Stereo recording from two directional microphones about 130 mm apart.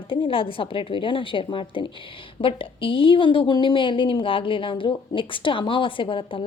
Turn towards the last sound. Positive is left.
turn(degrees=40)  # may be behind; listen again after turning